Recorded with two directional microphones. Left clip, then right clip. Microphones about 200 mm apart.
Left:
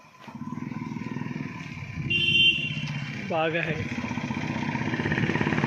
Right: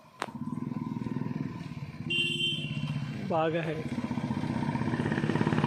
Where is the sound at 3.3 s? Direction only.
5° right (ahead or behind).